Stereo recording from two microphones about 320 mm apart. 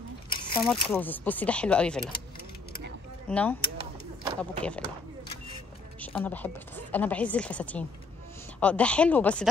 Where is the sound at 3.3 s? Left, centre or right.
Centre.